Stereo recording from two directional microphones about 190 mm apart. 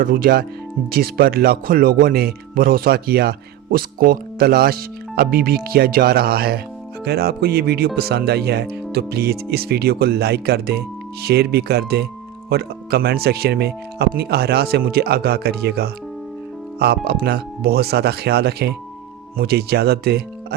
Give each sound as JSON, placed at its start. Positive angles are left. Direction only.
{"t": 0.0, "sound": "speech", "side_deg": -50}